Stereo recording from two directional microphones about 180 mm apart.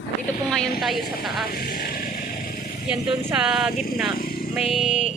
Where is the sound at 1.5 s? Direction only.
55° left (ahead or behind).